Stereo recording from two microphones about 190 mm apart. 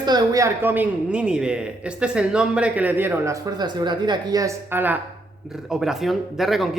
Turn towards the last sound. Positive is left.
turn(degrees=0)  # may be behind; listen again after turning